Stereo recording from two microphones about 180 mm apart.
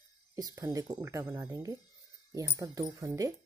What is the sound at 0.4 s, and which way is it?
Speech, 20° right (ahead or behind).